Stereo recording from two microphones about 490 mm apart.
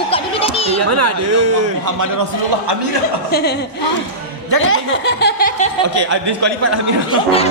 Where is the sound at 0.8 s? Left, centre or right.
Right.